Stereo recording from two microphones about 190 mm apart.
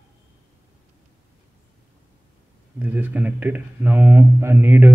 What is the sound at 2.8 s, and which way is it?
Speech, 10° right (ahead or behind).